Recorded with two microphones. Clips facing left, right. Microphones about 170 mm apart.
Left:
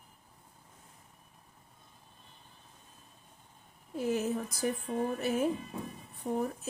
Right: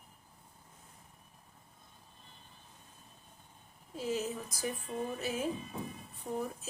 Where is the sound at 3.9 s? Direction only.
60° left (ahead or behind).